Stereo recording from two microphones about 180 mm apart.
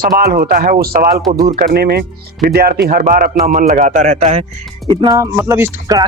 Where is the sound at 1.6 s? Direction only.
60° right (ahead or behind); by 4.5 s 40° right (ahead or behind).